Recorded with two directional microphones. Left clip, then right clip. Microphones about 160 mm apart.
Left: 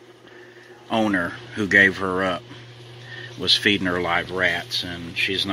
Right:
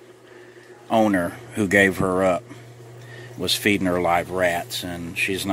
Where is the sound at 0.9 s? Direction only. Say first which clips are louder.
Right 2 dB; 25° right (ahead or behind).